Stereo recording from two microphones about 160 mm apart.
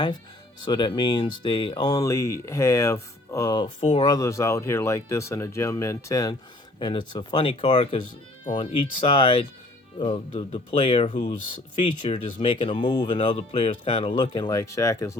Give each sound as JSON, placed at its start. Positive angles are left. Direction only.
{"t": 0.6, "sound": "speech", "side_deg": 30}
{"t": 3.8, "sound": "speech", "side_deg": 40}
{"t": 4.0, "sound": "speech", "side_deg": 20}